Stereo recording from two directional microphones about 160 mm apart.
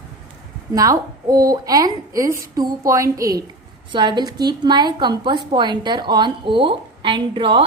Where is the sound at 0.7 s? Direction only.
20° right (ahead or behind).